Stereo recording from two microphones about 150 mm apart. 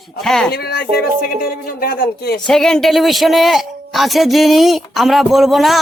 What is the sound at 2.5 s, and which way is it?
A man's voice, 5° left (ahead or behind).